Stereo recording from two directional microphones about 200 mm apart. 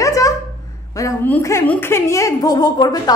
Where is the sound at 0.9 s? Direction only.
15° left (ahead or behind).